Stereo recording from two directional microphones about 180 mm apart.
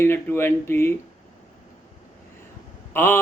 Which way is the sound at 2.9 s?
15° left (ahead or behind).